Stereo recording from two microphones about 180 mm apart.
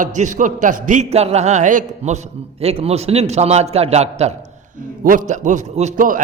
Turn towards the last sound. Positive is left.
turn(degrees=-50)  # may be behind; listen again after turning